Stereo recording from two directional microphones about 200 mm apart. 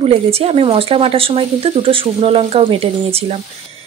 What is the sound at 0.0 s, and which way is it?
A woman's voice, 30° right (ahead or behind).